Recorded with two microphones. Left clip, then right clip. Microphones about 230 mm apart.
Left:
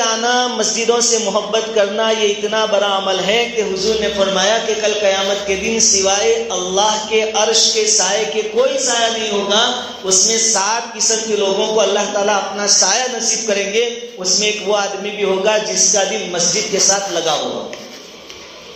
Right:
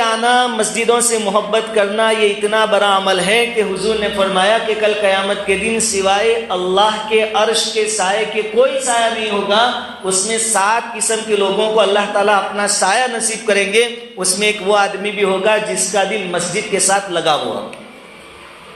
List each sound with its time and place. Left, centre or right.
0.0 s a sound: right
0.9 s speech: right
8.6 s a man's voice: right
10.2 s speech: right